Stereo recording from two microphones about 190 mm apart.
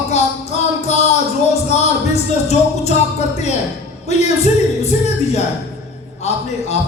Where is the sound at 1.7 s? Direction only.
35° left (ahead or behind).